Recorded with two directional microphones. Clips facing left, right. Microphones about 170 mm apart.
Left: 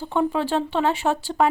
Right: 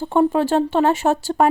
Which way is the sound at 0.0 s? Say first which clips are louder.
Right 6 dB; 45° right (ahead or behind).